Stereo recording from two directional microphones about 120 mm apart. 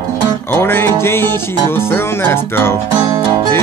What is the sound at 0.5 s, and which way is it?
Speech, 20° left (ahead or behind).